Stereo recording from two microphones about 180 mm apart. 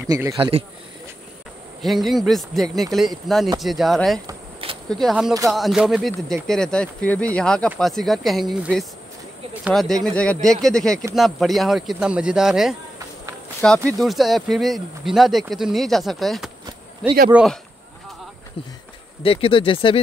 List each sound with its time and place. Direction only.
0.0 s speech: 20° right (ahead or behind)
0.4 s a man's voice: 35° right (ahead or behind)
1.8 s speech: centre (ahead or behind)
19.2 s speech: 30° left (ahead or behind)